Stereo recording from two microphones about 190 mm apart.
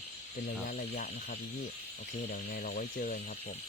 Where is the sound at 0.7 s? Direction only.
45° left (ahead or behind).